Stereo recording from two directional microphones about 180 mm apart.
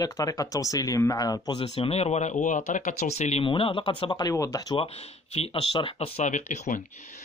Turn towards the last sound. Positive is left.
turn(degrees=45)  # may be behind; listen again after turning